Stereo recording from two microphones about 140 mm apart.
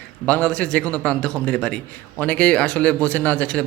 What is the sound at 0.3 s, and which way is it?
A man's voice, 10° left (ahead or behind).